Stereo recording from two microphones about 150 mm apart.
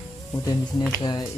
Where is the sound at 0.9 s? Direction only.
25° left (ahead or behind).